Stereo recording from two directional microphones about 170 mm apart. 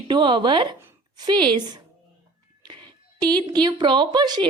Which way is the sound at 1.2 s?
25° right (ahead or behind).